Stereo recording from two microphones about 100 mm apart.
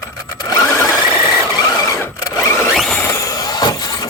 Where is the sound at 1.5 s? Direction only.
40° left (ahead or behind).